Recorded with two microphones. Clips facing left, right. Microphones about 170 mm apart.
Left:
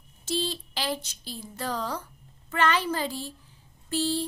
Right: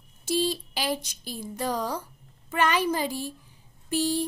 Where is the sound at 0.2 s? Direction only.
10° right (ahead or behind).